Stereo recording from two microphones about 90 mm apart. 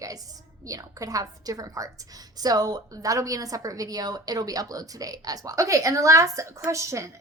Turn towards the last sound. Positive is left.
turn(degrees=-35)  # may be behind; listen again after turning